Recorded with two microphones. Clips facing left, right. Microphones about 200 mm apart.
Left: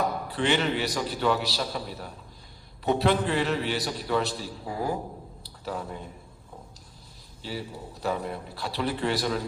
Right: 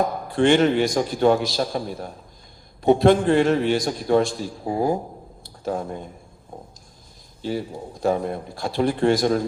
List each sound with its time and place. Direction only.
0.3 s a man's voice: 50° right (ahead or behind)
4.6 s speech: 30° right (ahead or behind)
5.4 s a sound: 45° right (ahead or behind)
7.4 s a man's voice: 45° right (ahead or behind)